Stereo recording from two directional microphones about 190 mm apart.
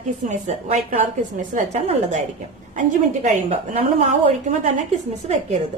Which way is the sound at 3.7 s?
35° right (ahead or behind).